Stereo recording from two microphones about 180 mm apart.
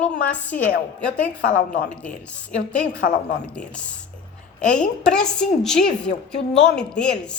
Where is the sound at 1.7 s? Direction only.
45° left (ahead or behind).